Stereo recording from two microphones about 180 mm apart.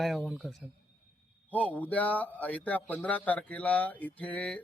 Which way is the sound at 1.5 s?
10° left (ahead or behind).